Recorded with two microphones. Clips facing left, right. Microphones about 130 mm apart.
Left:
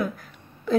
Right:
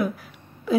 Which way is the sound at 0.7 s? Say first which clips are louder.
Even; 5° right (ahead or behind).